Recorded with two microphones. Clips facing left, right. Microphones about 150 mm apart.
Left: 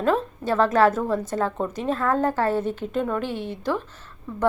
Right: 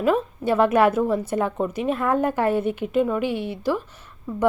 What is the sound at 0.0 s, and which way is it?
A woman's voice, 10° right (ahead or behind).